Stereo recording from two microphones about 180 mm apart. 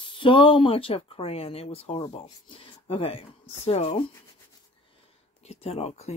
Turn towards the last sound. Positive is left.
turn(degrees=35)  # may be behind; listen again after turning